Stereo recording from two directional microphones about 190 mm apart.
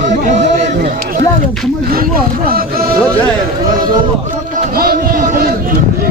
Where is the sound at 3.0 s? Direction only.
5° left (ahead or behind).